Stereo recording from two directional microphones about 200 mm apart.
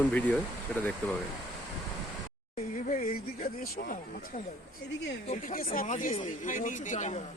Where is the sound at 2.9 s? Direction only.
45° left (ahead or behind).